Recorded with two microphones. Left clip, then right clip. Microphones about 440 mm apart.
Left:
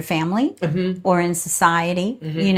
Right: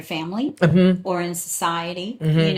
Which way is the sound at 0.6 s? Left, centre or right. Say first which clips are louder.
Right 5 dB; right.